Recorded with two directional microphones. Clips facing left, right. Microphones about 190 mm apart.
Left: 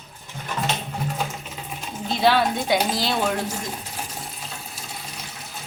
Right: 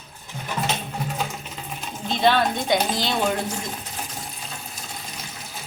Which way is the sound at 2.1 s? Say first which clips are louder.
Even; 5° left (ahead or behind).